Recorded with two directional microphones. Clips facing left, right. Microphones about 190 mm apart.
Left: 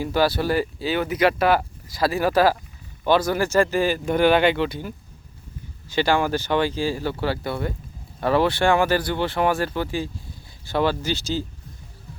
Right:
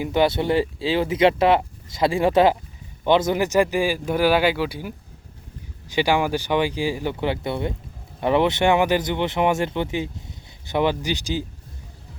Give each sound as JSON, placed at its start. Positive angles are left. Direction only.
{"t": 0.0, "sound": "speech", "side_deg": -20}